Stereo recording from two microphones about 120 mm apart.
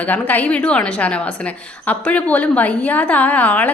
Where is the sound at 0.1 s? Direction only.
15° left (ahead or behind).